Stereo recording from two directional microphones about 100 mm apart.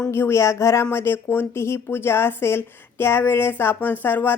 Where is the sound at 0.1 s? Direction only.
25° left (ahead or behind).